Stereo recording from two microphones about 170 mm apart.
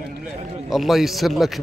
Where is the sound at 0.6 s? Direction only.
Centre (ahead or behind).